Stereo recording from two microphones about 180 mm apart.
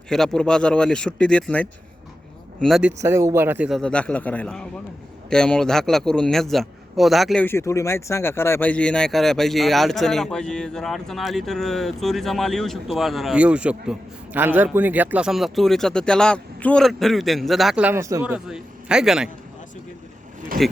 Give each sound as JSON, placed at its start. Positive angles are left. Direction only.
{"t": 0.1, "sound": "speech", "side_deg": 5}
{"t": 3.0, "sound": "speech", "side_deg": -15}
{"t": 3.7, "sound": "a man's voice", "side_deg": 5}
{"t": 7.4, "sound": "speech", "side_deg": 15}
{"t": 18.3, "sound": "a man's voice", "side_deg": -5}
{"t": 20.5, "sound": "speech", "side_deg": -50}